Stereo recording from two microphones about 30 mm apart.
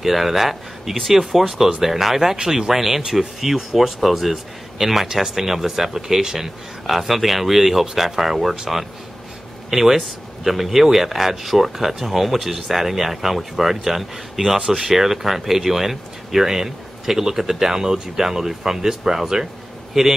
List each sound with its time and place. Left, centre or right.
0.0 s speech: centre
6.9 s speech: centre
9.7 s speech: centre